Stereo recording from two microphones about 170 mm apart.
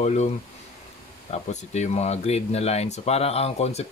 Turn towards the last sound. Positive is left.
turn(degrees=40)  # may be behind; listen again after turning